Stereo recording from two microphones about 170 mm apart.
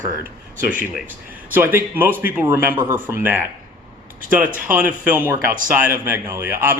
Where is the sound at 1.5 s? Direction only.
10° right (ahead or behind).